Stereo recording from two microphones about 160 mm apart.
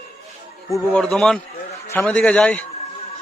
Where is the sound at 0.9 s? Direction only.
5° left (ahead or behind).